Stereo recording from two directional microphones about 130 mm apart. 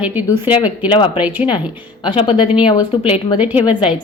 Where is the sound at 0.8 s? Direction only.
40° left (ahead or behind).